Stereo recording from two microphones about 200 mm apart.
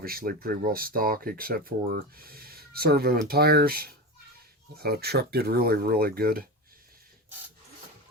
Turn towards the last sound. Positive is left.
turn(degrees=-50)  # may be behind; listen again after turning